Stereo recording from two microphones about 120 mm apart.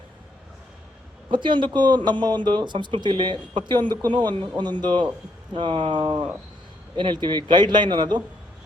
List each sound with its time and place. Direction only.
1.3 s speech: 40° right (ahead or behind)